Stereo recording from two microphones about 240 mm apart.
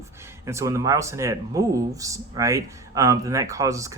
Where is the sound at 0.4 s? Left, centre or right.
Centre.